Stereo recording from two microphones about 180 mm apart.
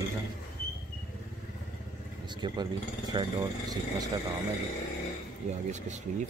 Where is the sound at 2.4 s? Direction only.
25° right (ahead or behind).